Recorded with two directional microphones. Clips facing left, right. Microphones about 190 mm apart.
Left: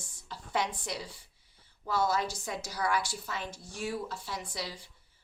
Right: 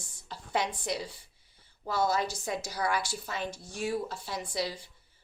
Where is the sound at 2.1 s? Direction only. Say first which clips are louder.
Right 2 dB; 25° right (ahead or behind).